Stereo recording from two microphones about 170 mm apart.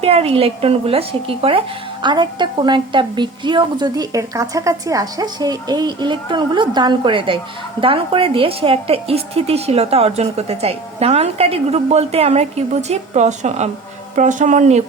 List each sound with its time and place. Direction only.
0.0 s a woman's voice: 35° right (ahead or behind)